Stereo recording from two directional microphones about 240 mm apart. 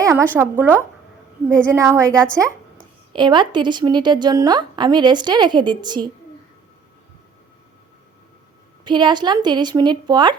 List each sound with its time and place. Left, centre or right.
0.0 s a woman's voice: centre
2.0 s a woman's voice: centre
3.1 s a woman's voice: centre
8.8 s a woman's voice: centre